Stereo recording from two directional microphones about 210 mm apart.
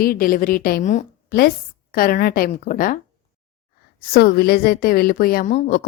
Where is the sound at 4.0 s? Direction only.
45° left (ahead or behind).